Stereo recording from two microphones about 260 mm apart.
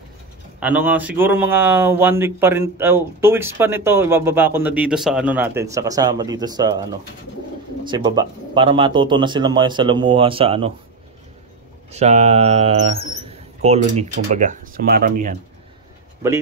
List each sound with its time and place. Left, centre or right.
0.6 s speech: centre
7.9 s speech: centre
11.9 s a sound: right
13.1 s speech: right